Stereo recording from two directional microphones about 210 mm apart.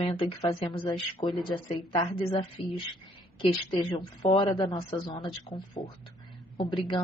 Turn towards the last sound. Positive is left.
turn(degrees=25)  # may be behind; listen again after turning